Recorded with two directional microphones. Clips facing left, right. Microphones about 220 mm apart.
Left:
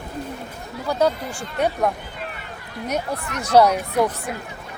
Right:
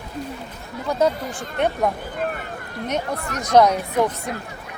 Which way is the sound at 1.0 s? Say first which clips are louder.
Even; centre (ahead or behind).